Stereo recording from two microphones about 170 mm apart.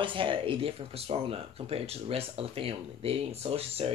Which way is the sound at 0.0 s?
30° right (ahead or behind).